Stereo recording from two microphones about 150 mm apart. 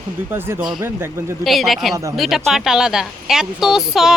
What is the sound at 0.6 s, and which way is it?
Speech, centre (ahead or behind).